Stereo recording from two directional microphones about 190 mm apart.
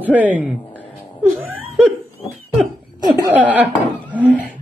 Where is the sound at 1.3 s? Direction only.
5° right (ahead or behind).